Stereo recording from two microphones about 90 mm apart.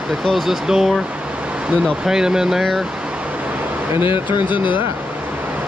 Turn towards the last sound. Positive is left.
turn(degrees=-20)  # may be behind; listen again after turning